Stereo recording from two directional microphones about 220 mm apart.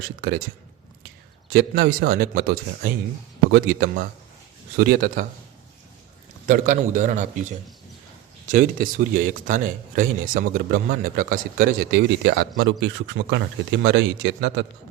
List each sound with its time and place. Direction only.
0.2 s speech: 45° right (ahead or behind)
1.5 s a man's voice: 45° right (ahead or behind)
6.5 s a man's voice: 35° right (ahead or behind)
8.4 s speech: 40° right (ahead or behind)